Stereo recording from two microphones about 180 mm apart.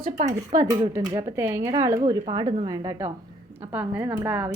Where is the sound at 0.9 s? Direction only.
20° right (ahead or behind).